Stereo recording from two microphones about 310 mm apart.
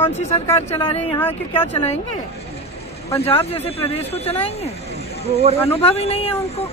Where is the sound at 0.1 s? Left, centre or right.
Left.